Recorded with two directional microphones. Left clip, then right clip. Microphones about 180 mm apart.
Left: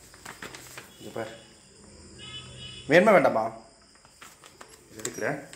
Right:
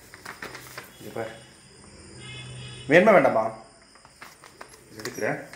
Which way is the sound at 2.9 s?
Centre (ahead or behind).